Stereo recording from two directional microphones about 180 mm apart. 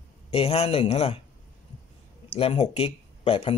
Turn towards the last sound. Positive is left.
turn(degrees=30)  # may be behind; listen again after turning